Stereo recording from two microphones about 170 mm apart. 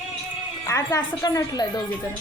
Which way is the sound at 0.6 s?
20° left (ahead or behind).